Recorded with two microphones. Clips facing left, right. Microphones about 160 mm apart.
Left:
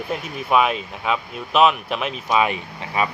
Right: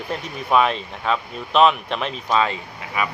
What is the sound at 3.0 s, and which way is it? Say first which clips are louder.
Speech: left 2 dB; 30° left (ahead or behind).